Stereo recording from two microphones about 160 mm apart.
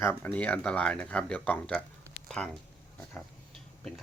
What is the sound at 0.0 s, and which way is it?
Speech, 15° left (ahead or behind).